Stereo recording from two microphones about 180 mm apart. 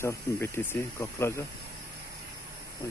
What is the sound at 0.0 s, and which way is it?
Speech, 15° left (ahead or behind).